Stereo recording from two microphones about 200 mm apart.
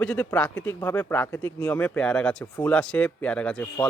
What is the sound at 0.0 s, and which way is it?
Speech, 5° left (ahead or behind).